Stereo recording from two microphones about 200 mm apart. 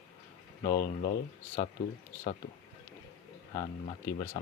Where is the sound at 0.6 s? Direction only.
15° left (ahead or behind).